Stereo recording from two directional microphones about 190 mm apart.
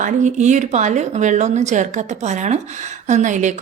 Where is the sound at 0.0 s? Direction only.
40° right (ahead or behind).